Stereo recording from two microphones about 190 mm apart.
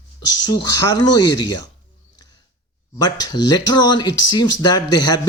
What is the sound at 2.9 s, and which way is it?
Speech, 20° left (ahead or behind).